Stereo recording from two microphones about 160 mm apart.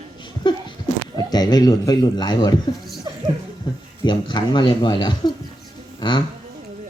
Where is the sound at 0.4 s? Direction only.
30° left (ahead or behind).